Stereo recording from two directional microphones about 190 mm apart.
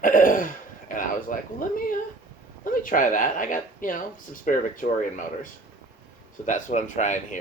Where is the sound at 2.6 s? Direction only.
45° left (ahead or behind).